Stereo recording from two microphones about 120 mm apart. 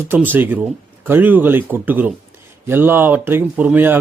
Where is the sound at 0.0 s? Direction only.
20° right (ahead or behind).